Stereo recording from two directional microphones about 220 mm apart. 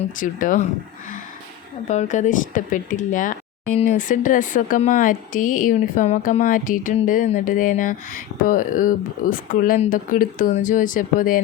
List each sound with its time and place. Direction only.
0.2 s speech: 35° left (ahead or behind)
1.9 s speech: 35° left (ahead or behind)